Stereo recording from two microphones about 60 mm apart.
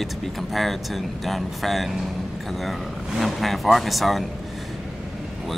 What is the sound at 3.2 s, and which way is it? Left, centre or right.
Speech, centre.